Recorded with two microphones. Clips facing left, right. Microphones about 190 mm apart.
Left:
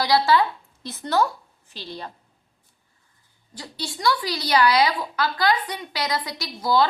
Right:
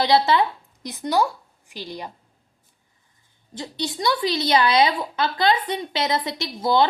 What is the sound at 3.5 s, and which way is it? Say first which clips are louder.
A woman's voice: right 5 dB; 20° right (ahead or behind).